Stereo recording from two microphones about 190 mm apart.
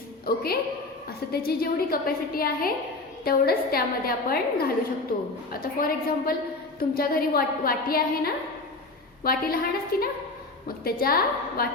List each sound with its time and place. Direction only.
0.3 s a woman's voice: 55° left (ahead or behind)